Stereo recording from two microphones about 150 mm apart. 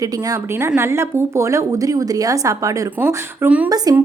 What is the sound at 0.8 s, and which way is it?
A woman's voice, 15° right (ahead or behind).